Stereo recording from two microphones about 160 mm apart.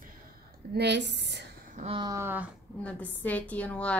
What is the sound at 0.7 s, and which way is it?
Speech, 90° right.